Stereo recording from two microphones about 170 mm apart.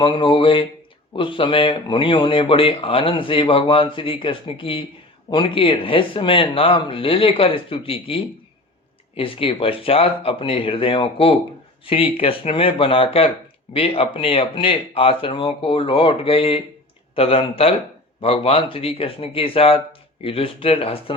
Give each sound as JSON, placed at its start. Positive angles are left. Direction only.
{"t": 0.0, "sound": "speech", "side_deg": 30}